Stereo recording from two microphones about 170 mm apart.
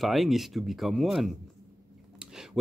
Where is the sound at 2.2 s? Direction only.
5° right (ahead or behind).